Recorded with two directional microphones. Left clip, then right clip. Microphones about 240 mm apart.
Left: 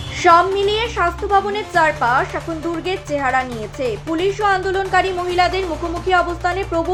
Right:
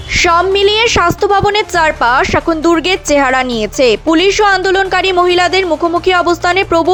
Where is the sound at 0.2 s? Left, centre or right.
Right.